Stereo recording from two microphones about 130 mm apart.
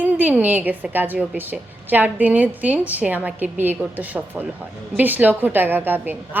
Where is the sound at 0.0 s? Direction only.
10° right (ahead or behind).